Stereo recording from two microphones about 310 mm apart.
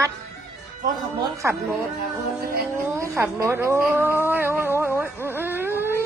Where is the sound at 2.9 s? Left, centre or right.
Centre.